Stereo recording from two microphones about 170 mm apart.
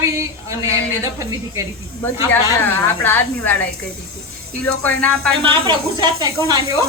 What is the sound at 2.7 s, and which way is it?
Speech, 10° left (ahead or behind).